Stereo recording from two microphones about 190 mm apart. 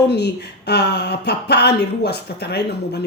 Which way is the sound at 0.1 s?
60° left (ahead or behind).